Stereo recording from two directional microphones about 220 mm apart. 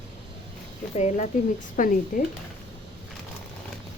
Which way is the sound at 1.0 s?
30° left (ahead or behind).